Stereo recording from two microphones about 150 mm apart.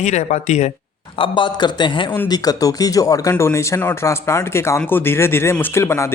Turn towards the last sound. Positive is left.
turn(degrees=15)  # may be behind; listen again after turning